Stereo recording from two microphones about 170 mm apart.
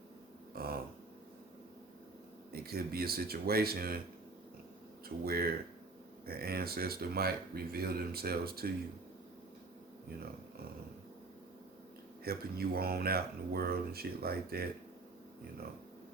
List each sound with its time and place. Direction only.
0.5 s a sound: 65° right (ahead or behind)
2.5 s speech: 65° right (ahead or behind)
5.0 s speech: 65° right (ahead or behind)
12.2 s speech: 65° right (ahead or behind)